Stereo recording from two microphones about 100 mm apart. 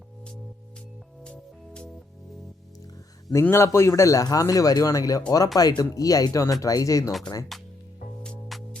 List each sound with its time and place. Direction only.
1.2 s music: 10° left (ahead or behind)
3.5 s speech: 30° left (ahead or behind)
8.2 s music: 5° left (ahead or behind)